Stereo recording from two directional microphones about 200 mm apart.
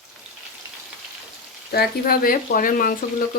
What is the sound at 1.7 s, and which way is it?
Speech, 50° left (ahead or behind).